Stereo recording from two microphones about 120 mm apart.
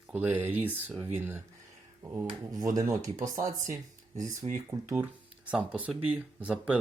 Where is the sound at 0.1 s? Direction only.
15° right (ahead or behind).